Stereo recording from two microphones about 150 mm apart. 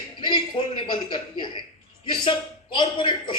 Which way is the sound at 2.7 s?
30° left (ahead or behind).